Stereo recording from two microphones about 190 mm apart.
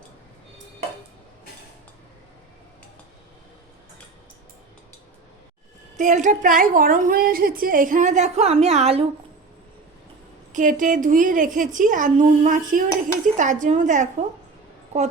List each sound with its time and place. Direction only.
6.0 s a woman's voice: 40° right (ahead or behind)
10.5 s a woman's voice: 45° right (ahead or behind)